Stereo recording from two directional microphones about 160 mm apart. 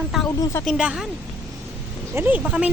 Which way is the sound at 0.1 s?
Centre (ahead or behind).